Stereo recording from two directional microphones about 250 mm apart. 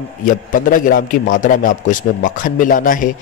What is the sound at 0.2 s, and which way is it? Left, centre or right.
A man's voice, left.